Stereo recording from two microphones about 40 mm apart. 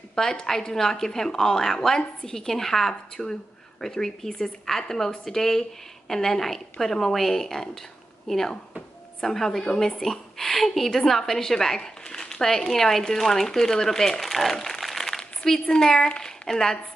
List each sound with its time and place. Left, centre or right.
0.1 s a woman's voice: centre
15.0 s a sound: centre
15.7 s a woman's voice: centre